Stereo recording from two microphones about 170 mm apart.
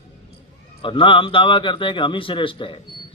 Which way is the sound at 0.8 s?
30° left (ahead or behind).